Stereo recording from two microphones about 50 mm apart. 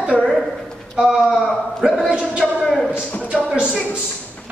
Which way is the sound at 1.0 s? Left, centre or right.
Centre.